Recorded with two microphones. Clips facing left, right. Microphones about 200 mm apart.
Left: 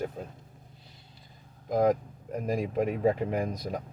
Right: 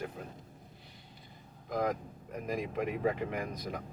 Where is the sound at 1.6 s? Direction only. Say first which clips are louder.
Left 8 dB; 40° left (ahead or behind).